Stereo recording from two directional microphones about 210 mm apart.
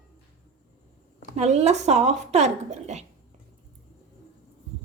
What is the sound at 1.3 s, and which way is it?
A woman's voice, 30° right (ahead or behind).